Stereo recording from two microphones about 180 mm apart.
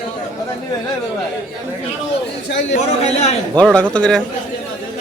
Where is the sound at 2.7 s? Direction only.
35° left (ahead or behind).